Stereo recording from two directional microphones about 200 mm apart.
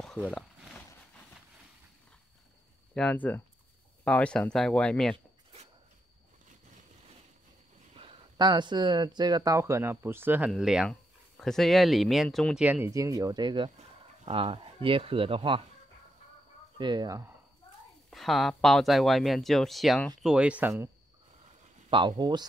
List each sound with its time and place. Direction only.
0.0 s a sound: 5° left (ahead or behind)
2.9 s speech: 5° left (ahead or behind)
5.1 s zipper: 30° right (ahead or behind)
7.9 s speech: 25° right (ahead or behind)
16.7 s speech: 20° right (ahead or behind)
18.1 s speech: centre (ahead or behind)
21.9 s speech: 25° right (ahead or behind)